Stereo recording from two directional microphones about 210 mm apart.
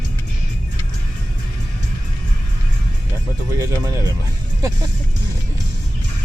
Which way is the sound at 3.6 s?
15° right (ahead or behind).